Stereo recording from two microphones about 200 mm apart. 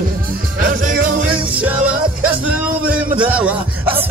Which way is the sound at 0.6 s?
45° right (ahead or behind).